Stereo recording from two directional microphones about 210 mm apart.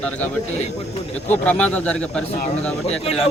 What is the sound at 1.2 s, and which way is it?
Speech, 10° left (ahead or behind).